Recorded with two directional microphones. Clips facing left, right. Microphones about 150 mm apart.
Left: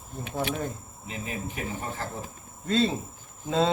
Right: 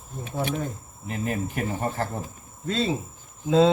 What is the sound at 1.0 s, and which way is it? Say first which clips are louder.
Speech: right 6 dB; 55° right (ahead or behind).